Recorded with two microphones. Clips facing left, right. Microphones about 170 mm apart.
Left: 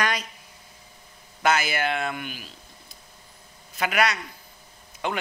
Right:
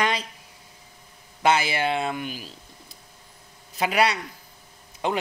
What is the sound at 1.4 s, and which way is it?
Speech, 30° right (ahead or behind).